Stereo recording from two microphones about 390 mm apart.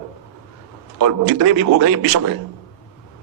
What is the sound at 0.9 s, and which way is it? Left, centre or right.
A man's voice, right.